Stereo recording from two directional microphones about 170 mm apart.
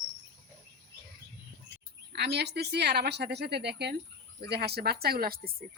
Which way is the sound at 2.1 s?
75° right (ahead or behind).